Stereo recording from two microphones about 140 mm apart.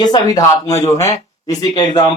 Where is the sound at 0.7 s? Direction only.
50° left (ahead or behind).